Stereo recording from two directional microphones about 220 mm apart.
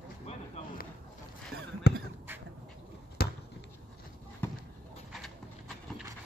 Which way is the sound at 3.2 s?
45° left (ahead or behind).